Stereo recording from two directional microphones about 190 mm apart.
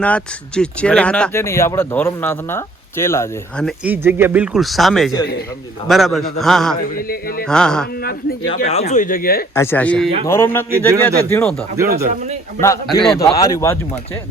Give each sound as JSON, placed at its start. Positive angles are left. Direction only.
{"t": 0.0, "sound": "speech", "side_deg": 5}
{"t": 3.6, "sound": "speech", "side_deg": 0}
{"t": 4.0, "sound": "speech", "side_deg": -10}
{"t": 6.9, "sound": "speech", "side_deg": 50}
{"t": 7.4, "sound": "speech", "side_deg": 5}
{"t": 8.6, "sound": "speech", "side_deg": 35}
{"t": 9.6, "sound": "speech", "side_deg": 10}
{"t": 11.8, "sound": "speech", "side_deg": -15}
{"t": 12.5, "sound": "speech", "side_deg": 15}